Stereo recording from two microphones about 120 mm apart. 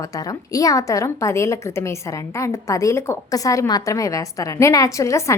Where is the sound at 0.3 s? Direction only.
30° left (ahead or behind).